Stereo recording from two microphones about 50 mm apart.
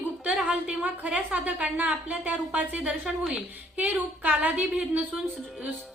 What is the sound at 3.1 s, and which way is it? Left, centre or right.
Speech, centre.